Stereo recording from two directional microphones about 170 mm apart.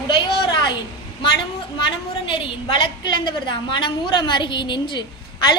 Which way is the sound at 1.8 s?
30° left (ahead or behind).